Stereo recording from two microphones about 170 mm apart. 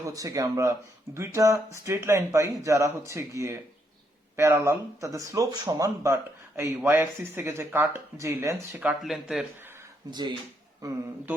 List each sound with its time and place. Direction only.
0.0 s speech: 20° right (ahead or behind); by 9.5 s centre (ahead or behind)
10.1 s speech: 25° right (ahead or behind)